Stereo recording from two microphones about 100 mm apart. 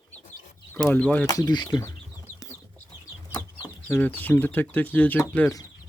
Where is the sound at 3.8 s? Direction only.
15° left (ahead or behind).